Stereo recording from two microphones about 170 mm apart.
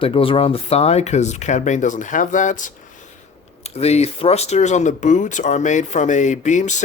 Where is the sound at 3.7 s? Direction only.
40° left (ahead or behind).